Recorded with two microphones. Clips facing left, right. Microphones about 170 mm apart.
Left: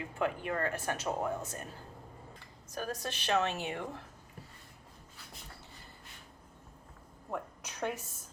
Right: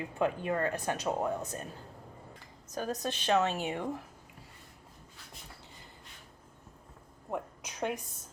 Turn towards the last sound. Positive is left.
turn(degrees=-15)  # may be behind; listen again after turning